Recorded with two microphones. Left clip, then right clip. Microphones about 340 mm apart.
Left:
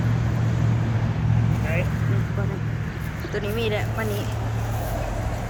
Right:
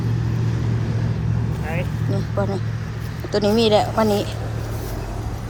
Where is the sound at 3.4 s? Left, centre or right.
Centre.